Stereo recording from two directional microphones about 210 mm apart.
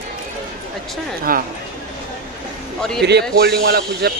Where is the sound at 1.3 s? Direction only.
45° right (ahead or behind).